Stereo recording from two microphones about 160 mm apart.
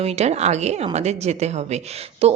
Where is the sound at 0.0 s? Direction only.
40° right (ahead or behind).